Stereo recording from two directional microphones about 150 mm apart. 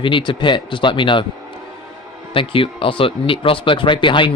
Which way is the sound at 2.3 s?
35° left (ahead or behind).